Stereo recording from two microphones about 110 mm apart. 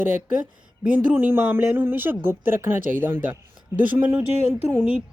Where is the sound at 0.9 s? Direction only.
15° right (ahead or behind).